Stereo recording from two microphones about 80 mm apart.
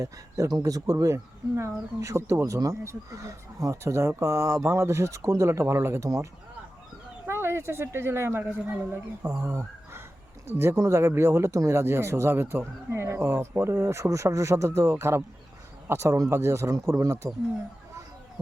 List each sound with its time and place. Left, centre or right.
0.0 s speech: right
7.3 s speech: right